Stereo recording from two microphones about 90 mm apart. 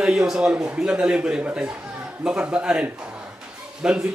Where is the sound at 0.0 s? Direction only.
10° right (ahead or behind).